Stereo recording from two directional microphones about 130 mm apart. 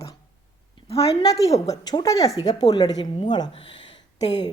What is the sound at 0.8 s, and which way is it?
Speech, 50° left (ahead or behind).